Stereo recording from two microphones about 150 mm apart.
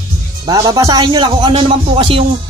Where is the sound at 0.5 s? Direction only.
25° right (ahead or behind).